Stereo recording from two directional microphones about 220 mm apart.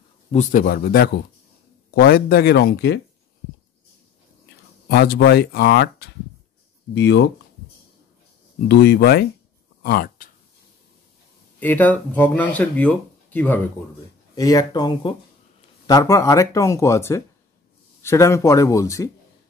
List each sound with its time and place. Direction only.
0.3 s speech: 35° left (ahead or behind)
4.8 s speech: 45° left (ahead or behind)
6.9 s speech: 55° left (ahead or behind)
8.6 s speech: 45° left (ahead or behind)
11.6 s speech: 10° left (ahead or behind)